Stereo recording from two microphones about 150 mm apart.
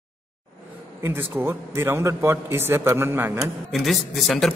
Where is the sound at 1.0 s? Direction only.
15° right (ahead or behind).